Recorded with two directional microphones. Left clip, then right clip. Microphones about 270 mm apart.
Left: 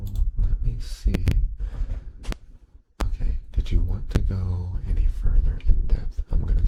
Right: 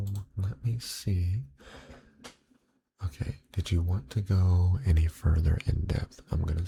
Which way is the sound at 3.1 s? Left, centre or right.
Centre.